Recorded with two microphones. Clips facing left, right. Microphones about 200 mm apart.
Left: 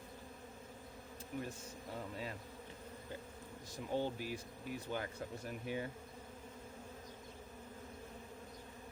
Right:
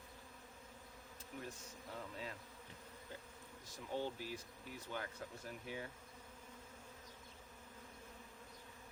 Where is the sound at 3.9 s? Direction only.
15° left (ahead or behind).